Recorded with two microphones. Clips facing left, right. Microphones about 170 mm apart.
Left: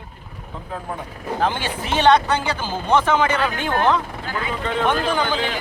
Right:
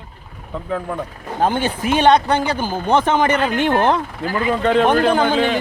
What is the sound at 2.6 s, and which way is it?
Speech, 15° right (ahead or behind).